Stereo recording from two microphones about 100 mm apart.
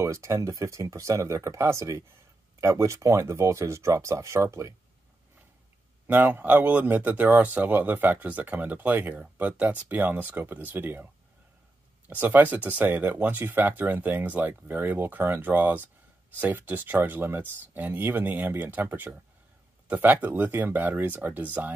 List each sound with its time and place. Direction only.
0.0 s speech: 30° right (ahead or behind)
6.0 s speech: 20° right (ahead or behind)
12.1 s speech: 20° right (ahead or behind)